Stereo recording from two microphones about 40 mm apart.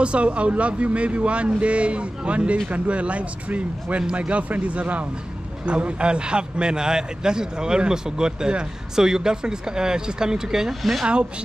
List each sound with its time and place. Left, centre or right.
0.0 s a man's voice: right; by 10.7 s centre
10.8 s speech: centre